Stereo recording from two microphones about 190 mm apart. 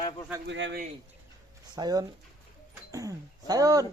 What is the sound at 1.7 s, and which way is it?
Speech, 20° right (ahead or behind).